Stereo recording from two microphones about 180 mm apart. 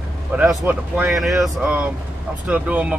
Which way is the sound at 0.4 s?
10° right (ahead or behind).